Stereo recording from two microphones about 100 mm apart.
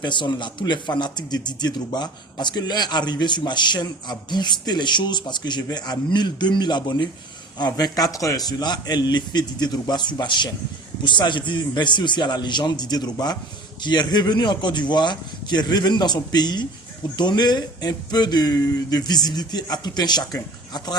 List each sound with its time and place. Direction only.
0.0 s speech: 50° left (ahead or behind)